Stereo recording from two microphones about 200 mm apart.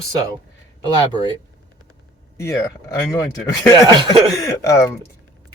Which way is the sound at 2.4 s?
15° left (ahead or behind).